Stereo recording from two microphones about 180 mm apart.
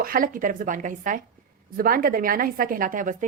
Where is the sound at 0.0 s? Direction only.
50° right (ahead or behind).